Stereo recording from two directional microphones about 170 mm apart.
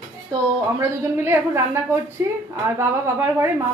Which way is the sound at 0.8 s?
15° right (ahead or behind).